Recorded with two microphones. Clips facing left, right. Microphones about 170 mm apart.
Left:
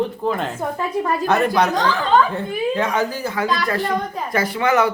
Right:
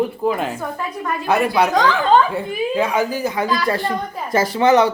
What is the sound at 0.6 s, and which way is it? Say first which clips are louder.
Speech: left 4 dB; 30° left (ahead or behind).